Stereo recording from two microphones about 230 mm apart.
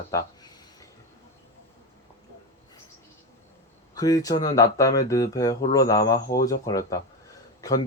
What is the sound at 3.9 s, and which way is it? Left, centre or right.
Speech, centre.